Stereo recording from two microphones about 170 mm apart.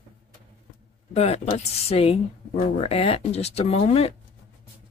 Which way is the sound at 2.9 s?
35° left (ahead or behind).